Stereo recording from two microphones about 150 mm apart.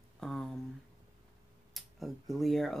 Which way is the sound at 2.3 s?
Centre (ahead or behind).